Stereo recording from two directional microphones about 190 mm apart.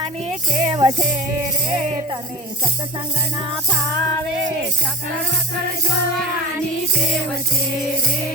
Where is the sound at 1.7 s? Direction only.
35° right (ahead or behind).